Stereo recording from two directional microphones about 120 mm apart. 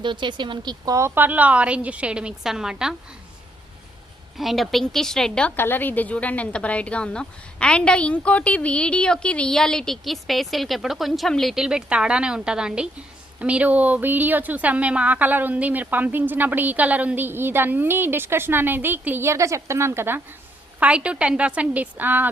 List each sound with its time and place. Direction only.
0.0 s speech: 40° right (ahead or behind)
0.9 s a woman's voice: 20° right (ahead or behind)
4.4 s a woman's voice: centre (ahead or behind)